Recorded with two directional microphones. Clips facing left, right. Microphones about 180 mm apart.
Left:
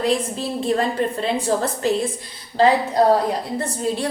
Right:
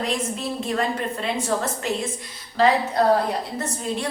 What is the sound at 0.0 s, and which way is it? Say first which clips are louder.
A woman's voice: left 5 dB; 30° left (ahead or behind).